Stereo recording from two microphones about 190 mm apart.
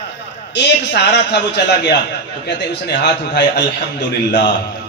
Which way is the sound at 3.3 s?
65° left (ahead or behind).